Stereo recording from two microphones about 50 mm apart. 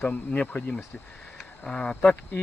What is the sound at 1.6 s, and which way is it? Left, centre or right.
Speech, centre.